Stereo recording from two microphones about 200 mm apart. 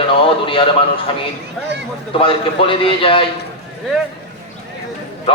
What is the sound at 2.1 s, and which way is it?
A man's voice, 25° left (ahead or behind).